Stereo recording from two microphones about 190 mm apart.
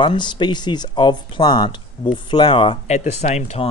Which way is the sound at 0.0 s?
25° left (ahead or behind).